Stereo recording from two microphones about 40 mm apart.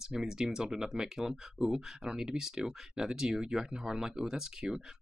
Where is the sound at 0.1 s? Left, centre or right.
Centre.